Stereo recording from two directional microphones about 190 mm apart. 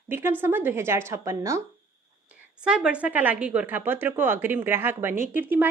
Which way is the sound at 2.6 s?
5° right (ahead or behind).